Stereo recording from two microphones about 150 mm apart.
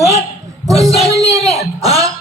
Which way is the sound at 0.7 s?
25° right (ahead or behind).